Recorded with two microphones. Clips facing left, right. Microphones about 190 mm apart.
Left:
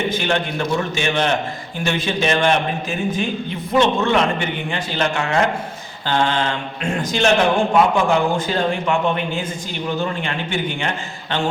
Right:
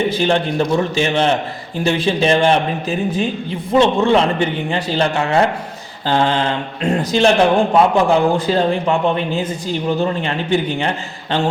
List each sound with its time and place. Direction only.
0.0 s a man's voice: 35° right (ahead or behind)